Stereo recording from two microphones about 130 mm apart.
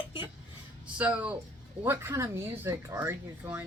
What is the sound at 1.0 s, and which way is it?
Speech, 10° right (ahead or behind).